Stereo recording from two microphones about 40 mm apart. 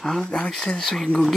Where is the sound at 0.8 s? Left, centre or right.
Centre.